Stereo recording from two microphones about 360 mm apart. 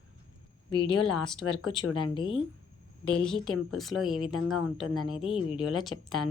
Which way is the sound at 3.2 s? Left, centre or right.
Centre.